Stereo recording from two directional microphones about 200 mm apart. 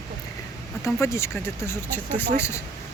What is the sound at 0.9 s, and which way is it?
Speech, 15° left (ahead or behind).